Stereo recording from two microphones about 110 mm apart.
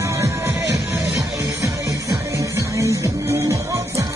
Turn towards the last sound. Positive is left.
turn(degrees=-25)  # may be behind; listen again after turning